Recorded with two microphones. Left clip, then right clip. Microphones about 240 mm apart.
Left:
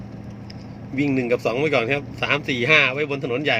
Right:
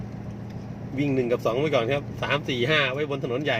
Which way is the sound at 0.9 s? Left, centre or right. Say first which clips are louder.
Left 3 dB; left.